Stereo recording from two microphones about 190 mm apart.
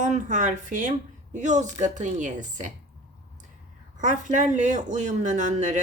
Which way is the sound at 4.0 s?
40° right (ahead or behind).